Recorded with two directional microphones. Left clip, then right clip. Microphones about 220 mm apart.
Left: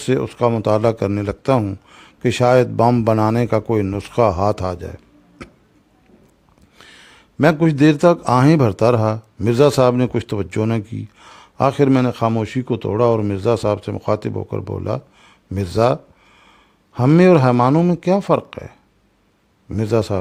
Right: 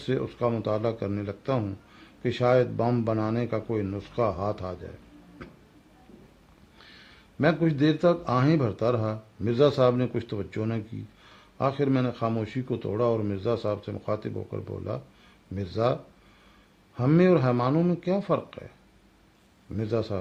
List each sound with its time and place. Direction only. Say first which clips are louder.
0.0 s a man's voice: left 10 dB; 45° left (ahead or behind)
6.7 s a man's voice: left 8 dB; 45° left (ahead or behind)